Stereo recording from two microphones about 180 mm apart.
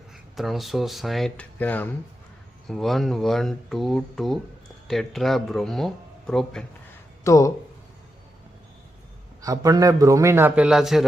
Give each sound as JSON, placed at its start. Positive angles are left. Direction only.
{"t": 0.3, "sound": "speech", "side_deg": 0}
{"t": 7.3, "sound": "speech", "side_deg": 15}
{"t": 9.4, "sound": "a man's voice", "side_deg": -20}